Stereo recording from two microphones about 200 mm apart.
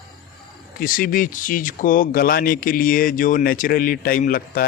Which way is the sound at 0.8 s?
45° left (ahead or behind).